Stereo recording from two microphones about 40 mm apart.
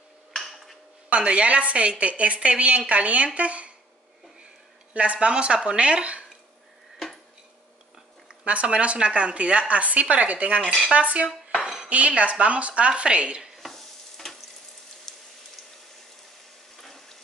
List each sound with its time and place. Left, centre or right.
0.3 s dishes: centre
1.1 s a woman's voice: right
4.9 s speech: right
8.5 s a woman's voice: right
11.6 s dishes: right
12.2 s a woman's voice: right
13.6 s stir: centre
15.1 s a sound: centre
16.8 s frying: centre